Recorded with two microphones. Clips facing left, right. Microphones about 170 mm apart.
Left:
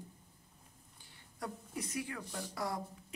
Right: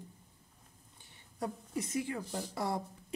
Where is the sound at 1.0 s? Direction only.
25° right (ahead or behind).